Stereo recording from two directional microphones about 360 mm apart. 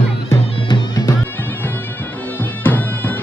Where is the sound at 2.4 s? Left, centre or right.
Centre.